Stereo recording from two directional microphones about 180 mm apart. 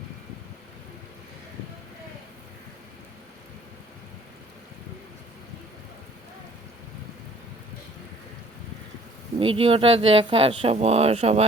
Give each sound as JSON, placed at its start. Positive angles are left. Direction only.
{"t": 9.4, "sound": "speech", "side_deg": -30}